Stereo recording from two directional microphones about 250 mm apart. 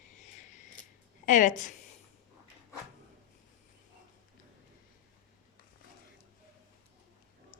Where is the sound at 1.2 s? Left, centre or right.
Left.